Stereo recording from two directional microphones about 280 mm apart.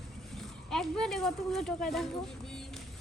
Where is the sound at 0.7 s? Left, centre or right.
Centre.